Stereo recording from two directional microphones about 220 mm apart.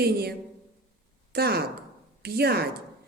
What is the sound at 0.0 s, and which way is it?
A woman's voice, 45° right (ahead or behind).